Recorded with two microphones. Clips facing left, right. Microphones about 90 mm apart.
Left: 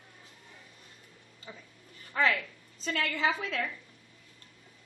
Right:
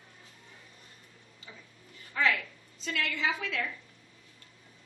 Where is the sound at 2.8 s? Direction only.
40° left (ahead or behind).